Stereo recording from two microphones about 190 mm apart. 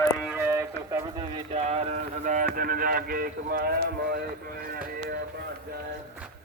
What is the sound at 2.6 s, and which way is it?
Speech, 50° right (ahead or behind).